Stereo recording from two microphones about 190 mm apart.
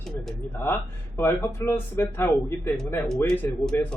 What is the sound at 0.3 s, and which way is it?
Speech, 10° left (ahead or behind).